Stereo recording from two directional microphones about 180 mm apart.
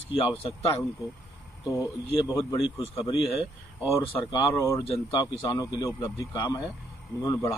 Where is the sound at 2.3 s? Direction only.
20° left (ahead or behind).